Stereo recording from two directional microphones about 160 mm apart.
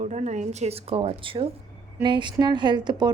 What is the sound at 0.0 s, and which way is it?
A woman's voice, 45° right (ahead or behind).